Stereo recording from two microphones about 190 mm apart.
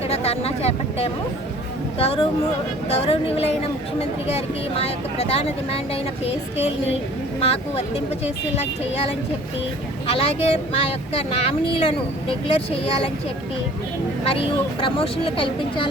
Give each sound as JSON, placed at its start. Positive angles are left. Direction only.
{"t": 0.1, "sound": "speech", "side_deg": 30}
{"t": 14.3, "sound": "speech", "side_deg": 30}